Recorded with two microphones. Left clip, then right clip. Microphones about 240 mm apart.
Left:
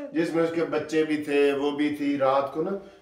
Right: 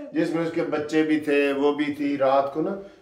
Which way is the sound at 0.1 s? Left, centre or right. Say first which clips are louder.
Even; centre.